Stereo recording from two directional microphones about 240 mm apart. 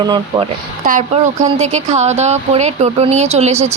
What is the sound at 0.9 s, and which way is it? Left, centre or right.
A woman's voice, right.